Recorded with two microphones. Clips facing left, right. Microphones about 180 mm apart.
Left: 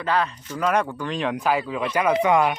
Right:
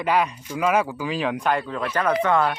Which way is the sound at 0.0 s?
10° right (ahead or behind).